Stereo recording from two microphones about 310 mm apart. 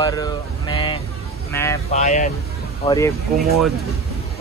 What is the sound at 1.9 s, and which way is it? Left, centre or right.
Speech, left.